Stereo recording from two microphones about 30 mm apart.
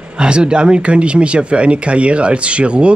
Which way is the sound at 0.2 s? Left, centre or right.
Right.